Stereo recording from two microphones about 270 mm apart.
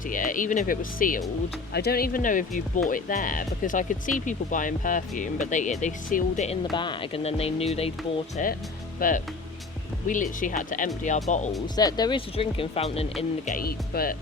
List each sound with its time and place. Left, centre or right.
0.1 s speech: left
11.8 s speech: centre; by 14.2 s left